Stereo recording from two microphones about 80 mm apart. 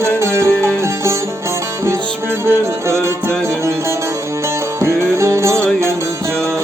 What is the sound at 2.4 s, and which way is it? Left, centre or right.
Music, right.